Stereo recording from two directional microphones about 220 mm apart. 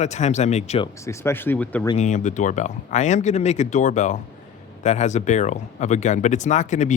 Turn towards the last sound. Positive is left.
turn(degrees=35)  # may be behind; listen again after turning